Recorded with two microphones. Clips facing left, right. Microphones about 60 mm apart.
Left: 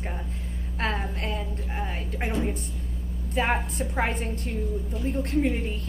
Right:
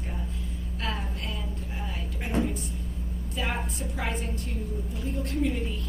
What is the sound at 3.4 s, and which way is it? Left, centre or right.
A woman's voice, left.